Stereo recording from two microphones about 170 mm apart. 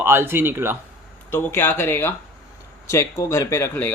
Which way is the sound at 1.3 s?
15° left (ahead or behind).